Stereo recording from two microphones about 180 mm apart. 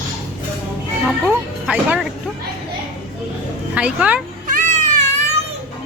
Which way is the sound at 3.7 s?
5° right (ahead or behind).